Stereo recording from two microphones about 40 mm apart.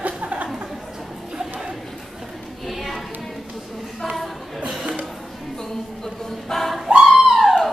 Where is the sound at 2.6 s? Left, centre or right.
Centre.